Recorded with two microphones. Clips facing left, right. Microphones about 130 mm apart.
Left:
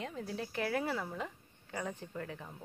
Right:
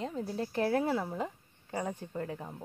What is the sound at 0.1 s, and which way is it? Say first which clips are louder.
A woman's voice: right 5 dB; 30° right (ahead or behind).